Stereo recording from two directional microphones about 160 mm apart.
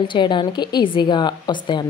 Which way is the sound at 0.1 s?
30° left (ahead or behind).